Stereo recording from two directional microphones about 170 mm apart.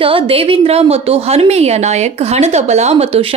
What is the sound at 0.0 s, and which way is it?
Speech, 35° right (ahead or behind).